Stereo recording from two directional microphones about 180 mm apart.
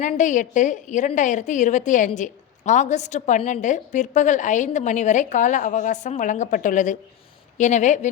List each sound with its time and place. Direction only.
0.0 s a woman's voice: 45° left (ahead or behind)